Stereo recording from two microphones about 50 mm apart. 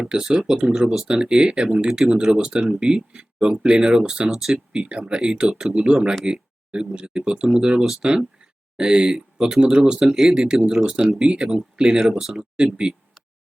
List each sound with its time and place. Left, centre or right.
0.0 s speech: centre
1.0 s speech: centre
4.3 s speech: centre
10.0 s speech: centre
12.5 s speech: right